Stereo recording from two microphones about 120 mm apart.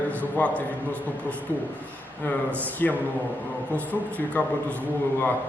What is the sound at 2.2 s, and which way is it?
Speech, 15° left (ahead or behind).